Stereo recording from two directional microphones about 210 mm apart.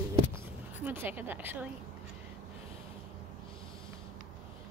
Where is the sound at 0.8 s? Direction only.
10° right (ahead or behind).